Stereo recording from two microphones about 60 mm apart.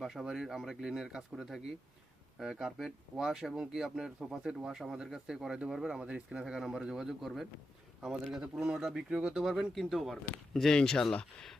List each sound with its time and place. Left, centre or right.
0.0 s speech: centre
9.4 s speech: centre